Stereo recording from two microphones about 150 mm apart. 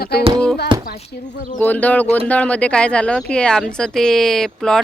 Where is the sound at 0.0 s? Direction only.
90° left.